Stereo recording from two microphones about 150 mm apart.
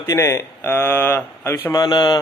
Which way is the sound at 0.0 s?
20° left (ahead or behind).